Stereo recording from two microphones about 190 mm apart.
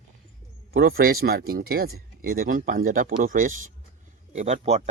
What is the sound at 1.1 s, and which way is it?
Speech, 75° right (ahead or behind).